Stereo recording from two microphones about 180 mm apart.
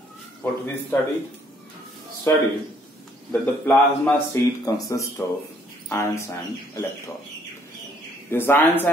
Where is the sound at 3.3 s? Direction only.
10° left (ahead or behind).